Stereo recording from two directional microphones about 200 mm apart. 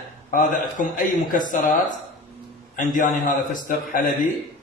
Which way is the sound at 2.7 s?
40° left (ahead or behind).